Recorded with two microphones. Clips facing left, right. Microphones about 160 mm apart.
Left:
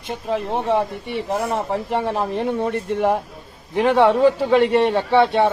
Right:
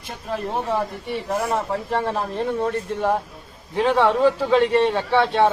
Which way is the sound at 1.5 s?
15° left (ahead or behind).